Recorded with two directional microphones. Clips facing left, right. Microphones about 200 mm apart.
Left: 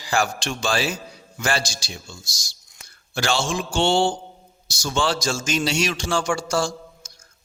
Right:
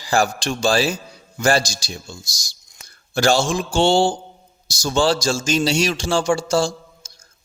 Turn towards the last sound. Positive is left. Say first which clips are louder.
# even
turn(degrees=-30)  # may be behind; listen again after turning